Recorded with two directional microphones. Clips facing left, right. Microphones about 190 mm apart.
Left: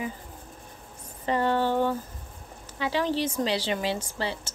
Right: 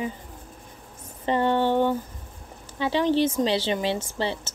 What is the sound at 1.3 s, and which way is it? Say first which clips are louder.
A woman's voice: right 3 dB; 25° right (ahead or behind).